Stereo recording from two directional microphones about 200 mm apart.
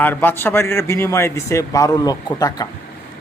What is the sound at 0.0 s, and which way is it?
A man's voice, 10° left (ahead or behind).